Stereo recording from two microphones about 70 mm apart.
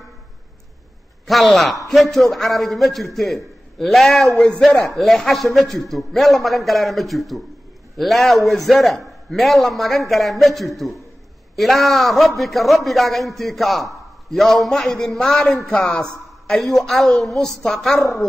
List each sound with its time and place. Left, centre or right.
1.2 s a man's voice: centre
15.7 s a man's voice: left
16.4 s a man's voice: centre